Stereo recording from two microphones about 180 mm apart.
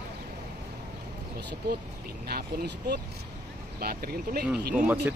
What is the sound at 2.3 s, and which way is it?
Speech, 60° right (ahead or behind).